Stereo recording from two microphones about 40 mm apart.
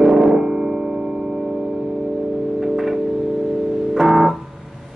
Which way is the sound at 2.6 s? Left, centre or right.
Centre.